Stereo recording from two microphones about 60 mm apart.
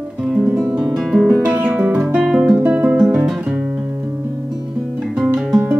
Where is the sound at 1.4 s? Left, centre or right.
Right.